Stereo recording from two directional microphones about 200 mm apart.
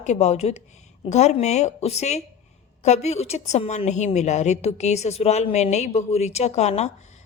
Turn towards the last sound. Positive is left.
turn(degrees=35)  # may be behind; listen again after turning